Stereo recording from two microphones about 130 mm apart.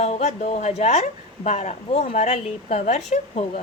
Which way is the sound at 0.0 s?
60° left (ahead or behind).